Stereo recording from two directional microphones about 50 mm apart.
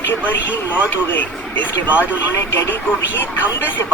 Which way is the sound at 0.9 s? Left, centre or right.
Left.